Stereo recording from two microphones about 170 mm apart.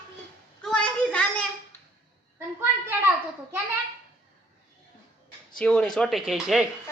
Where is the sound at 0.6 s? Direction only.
5° left (ahead or behind).